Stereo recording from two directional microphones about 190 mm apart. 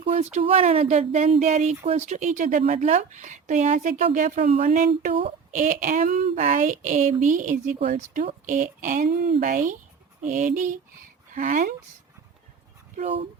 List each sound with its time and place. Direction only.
0.0 s a woman's voice: 35° right (ahead or behind)
4.6 s speech: 45° right (ahead or behind)
13.0 s speech: 30° right (ahead or behind)